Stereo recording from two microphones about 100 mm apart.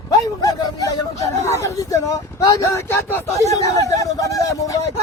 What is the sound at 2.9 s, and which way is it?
Speech, 25° left (ahead or behind).